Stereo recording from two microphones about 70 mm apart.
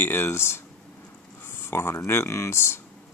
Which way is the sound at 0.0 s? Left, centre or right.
Left.